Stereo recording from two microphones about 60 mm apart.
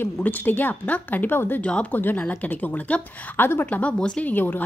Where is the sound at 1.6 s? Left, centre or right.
Left.